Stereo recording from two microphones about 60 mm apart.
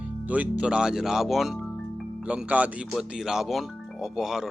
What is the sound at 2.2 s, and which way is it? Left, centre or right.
Speech, centre.